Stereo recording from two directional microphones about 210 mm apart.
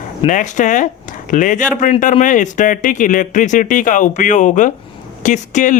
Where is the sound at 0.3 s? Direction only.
35° left (ahead or behind).